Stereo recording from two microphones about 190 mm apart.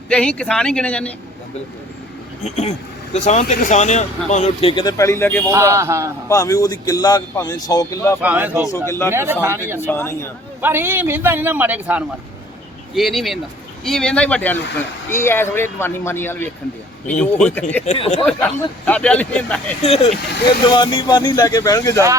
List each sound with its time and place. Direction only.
0.1 s speech: 5° left (ahead or behind)
2.4 s speech: 40° left (ahead or behind)
4.7 s speech: 20° left (ahead or behind)
5.5 s a man's voice: 15° right (ahead or behind)
6.2 s speech: 15° left (ahead or behind)
8.2 s a man's voice: 10° right (ahead or behind)
8.9 s speech: 15° left (ahead or behind)
9.1 s a man's voice: 15° right (ahead or behind)
9.8 s speech: 15° left (ahead or behind)
10.6 s a man's voice: 10° right (ahead or behind); by 17.8 s 10° left (ahead or behind)
17.8 s speech: 30° left (ahead or behind)
18.3 s speech: 10° left (ahead or behind)
19.8 s speech: 35° left (ahead or behind); by 22.0 s 15° left (ahead or behind)